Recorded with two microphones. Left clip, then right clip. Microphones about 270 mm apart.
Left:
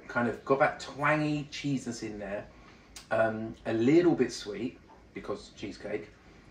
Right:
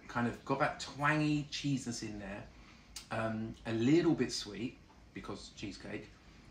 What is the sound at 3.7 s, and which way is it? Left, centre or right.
Speech, centre.